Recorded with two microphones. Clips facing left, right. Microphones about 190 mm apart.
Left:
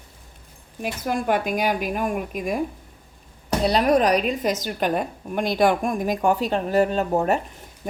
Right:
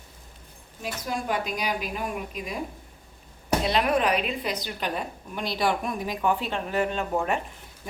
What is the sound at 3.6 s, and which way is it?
A woman's voice, 40° left (ahead or behind).